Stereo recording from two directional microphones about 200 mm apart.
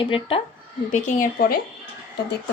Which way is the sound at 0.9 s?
45° left (ahead or behind).